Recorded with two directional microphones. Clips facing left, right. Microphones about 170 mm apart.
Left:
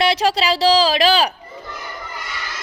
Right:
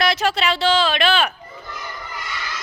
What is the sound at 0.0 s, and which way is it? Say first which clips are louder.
Speech: left 2 dB; 30° left (ahead or behind).